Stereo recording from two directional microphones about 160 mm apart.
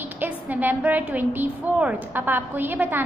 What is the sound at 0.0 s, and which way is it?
A woman's voice, 10° right (ahead or behind).